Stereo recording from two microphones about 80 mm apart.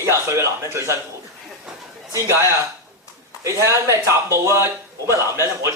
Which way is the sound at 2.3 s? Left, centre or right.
Right.